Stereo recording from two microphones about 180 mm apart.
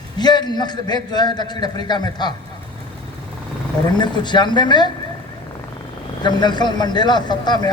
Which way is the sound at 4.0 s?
25° left (ahead or behind).